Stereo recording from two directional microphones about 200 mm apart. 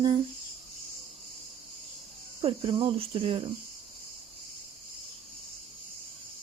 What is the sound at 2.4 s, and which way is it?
Speech, 25° right (ahead or behind).